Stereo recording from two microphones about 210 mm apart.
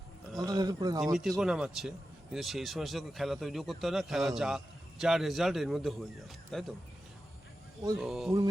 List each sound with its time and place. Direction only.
0.3 s a sound: 15° right (ahead or behind)
1.0 s speech: centre (ahead or behind)
7.9 s speech: centre (ahead or behind)